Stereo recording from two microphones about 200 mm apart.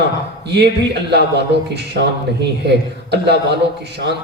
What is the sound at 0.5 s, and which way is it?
A man's voice, 55° right (ahead or behind).